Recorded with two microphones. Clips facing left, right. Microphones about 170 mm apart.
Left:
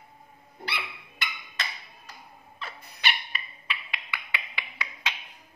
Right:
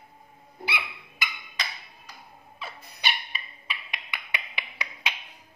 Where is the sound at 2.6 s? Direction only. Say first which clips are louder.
Even; 10° right (ahead or behind).